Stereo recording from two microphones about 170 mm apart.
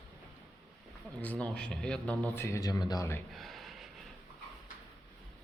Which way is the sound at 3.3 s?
Centre (ahead or behind).